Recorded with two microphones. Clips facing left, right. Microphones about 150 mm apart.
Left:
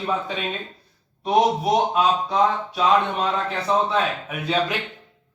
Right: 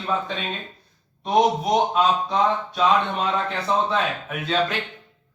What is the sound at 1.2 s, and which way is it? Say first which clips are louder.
Speech: even; 5° left (ahead or behind).